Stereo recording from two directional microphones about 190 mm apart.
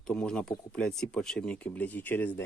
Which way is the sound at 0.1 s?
5° left (ahead or behind).